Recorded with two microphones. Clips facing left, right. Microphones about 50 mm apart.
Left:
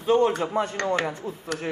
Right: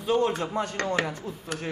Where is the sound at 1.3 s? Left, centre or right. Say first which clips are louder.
Left 3 dB; left.